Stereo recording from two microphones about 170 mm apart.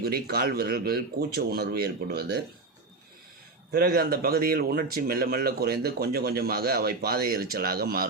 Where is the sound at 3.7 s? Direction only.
60° right (ahead or behind).